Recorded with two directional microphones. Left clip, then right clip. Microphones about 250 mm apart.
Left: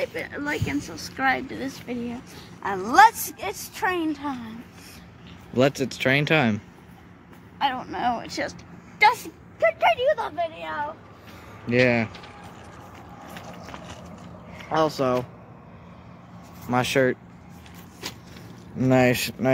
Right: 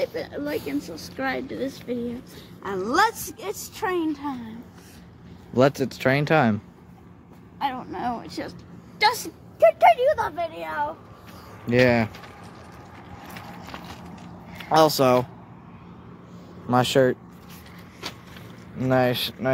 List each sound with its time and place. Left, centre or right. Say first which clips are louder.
0.1 s speech: even; right
0.4 s a woman's voice: left 1 dB; centre
5.5 s speech: right 2 dB; centre
9.0 s a woman's voice: left 3 dB; right
11.6 s speech: right 1 dB; centre
14.7 s speech: right 5 dB; right
16.7 s speech: right 2 dB; centre
18.8 s speech: left 1 dB; left